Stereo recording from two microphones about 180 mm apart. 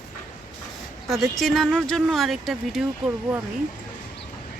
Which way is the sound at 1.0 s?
Centre (ahead or behind).